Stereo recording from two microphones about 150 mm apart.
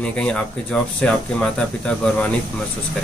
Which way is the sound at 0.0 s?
5° left (ahead or behind).